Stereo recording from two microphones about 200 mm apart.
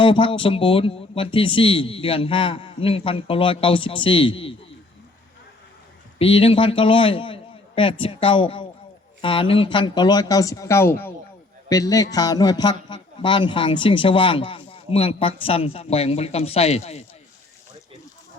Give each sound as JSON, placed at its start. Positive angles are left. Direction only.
{"t": 0.0, "sound": "a man's voice", "side_deg": 25}
{"t": 6.1, "sound": "a man's voice", "side_deg": 25}